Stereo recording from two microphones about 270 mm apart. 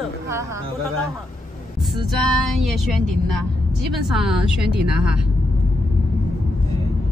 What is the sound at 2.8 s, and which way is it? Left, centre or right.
Speech, centre.